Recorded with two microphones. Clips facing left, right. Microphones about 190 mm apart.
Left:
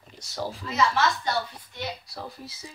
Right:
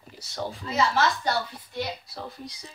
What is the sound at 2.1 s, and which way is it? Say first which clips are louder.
Speech: right 1 dB; centre (ahead or behind).